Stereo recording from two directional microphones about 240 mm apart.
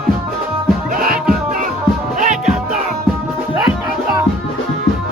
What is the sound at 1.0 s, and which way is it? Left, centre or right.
Music, right.